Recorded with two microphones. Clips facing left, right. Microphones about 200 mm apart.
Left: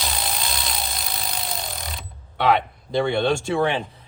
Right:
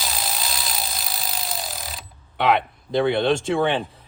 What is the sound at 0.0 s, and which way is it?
Vehicle, centre (ahead or behind).